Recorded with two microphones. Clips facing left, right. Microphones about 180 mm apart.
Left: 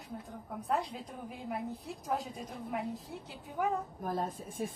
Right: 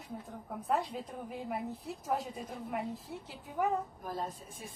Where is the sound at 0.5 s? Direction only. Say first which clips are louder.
Right 1 dB; centre (ahead or behind).